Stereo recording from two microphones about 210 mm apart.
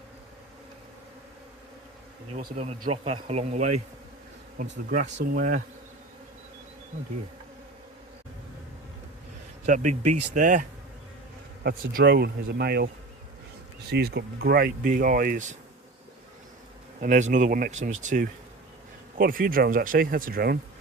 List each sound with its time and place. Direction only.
2.6 s speech: 30° right (ahead or behind)
4.7 s speech: 50° right (ahead or behind)
9.6 s speech: 35° right (ahead or behind)
13.9 s speech: 55° right (ahead or behind); by 15.5 s 35° right (ahead or behind)
17.0 s speech: 35° right (ahead or behind)